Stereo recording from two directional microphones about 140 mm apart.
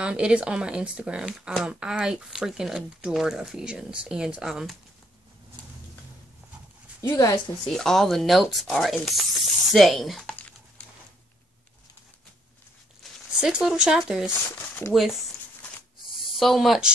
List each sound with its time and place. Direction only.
0.0 s speech: 5° right (ahead or behind)
7.0 s a woman's voice: 25° left (ahead or behind)
7.6 s speech: centre (ahead or behind)
13.4 s speech: 5° right (ahead or behind)
14.8 s speech: 15° left (ahead or behind)
16.3 s speech: centre (ahead or behind)